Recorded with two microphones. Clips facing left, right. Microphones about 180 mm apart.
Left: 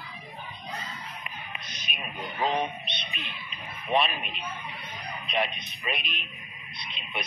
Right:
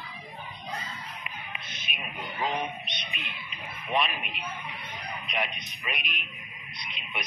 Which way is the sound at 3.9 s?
30° left (ahead or behind).